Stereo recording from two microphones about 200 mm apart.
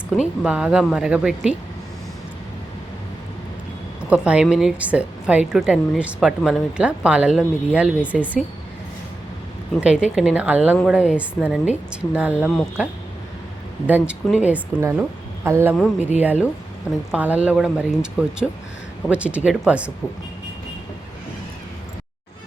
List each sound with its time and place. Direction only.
0.2 s a woman's voice: 5° right (ahead or behind)
4.1 s a woman's voice: 5° right (ahead or behind)
9.8 s a woman's voice: 5° right (ahead or behind)
14.1 s speech: 5° right (ahead or behind)
16.0 s speech: 35° left (ahead or behind)
16.2 s a woman's voice: 10° right (ahead or behind)